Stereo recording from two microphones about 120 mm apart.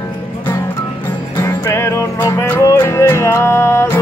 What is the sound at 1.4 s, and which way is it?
Music, 20° left (ahead or behind).